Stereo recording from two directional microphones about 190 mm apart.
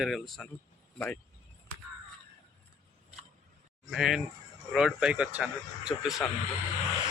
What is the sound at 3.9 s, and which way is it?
Speech, centre (ahead or behind).